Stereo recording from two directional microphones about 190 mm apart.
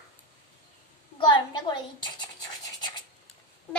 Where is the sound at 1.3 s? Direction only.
25° left (ahead or behind).